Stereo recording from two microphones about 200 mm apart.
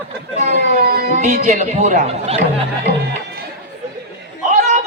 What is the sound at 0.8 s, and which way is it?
Chatter, 45° right (ahead or behind).